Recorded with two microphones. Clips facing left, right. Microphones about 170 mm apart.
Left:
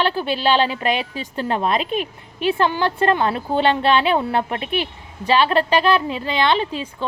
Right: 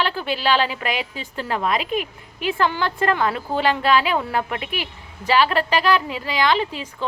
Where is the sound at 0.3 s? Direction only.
20° left (ahead or behind).